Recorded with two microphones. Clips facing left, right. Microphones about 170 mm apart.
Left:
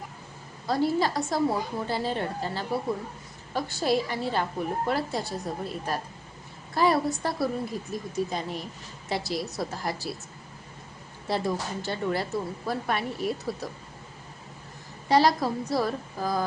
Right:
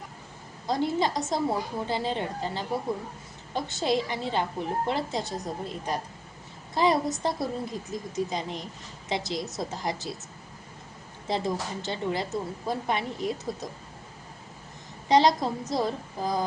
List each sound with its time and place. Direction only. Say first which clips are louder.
0.7 s a woman's voice: left 1 dB; 20° right (ahead or behind)
11.3 s a woman's voice: left 1 dB; 20° right (ahead or behind)
15.1 s a woman's voice: even; 20° right (ahead or behind)